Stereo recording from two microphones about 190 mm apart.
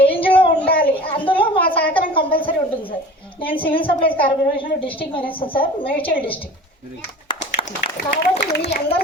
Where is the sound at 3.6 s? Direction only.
30° left (ahead or behind).